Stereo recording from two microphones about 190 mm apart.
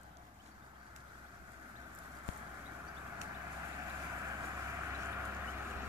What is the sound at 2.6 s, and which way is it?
Vehicle, 10° right (ahead or behind).